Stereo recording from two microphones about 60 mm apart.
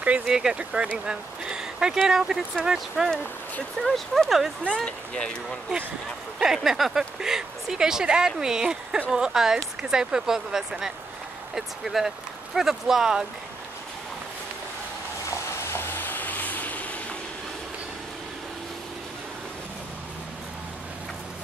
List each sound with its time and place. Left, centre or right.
0.3 s speech: centre
3.8 s speech: centre
4.8 s speech: centre
6.4 s speech: centre
15.2 s vehicle: left